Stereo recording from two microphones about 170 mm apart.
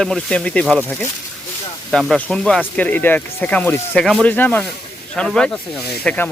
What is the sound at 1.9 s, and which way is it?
Speech, centre (ahead or behind).